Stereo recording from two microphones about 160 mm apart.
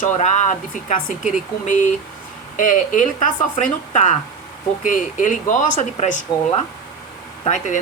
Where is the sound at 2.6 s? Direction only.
55° left (ahead or behind).